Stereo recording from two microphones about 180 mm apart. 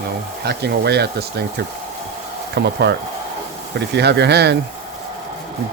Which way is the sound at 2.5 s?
65° right (ahead or behind).